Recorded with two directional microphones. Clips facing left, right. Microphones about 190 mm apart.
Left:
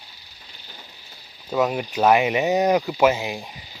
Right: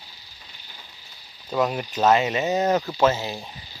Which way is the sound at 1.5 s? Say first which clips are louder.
Left 2 dB; 5° left (ahead or behind).